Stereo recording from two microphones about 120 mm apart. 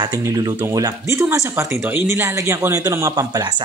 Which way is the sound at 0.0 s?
30° right (ahead or behind).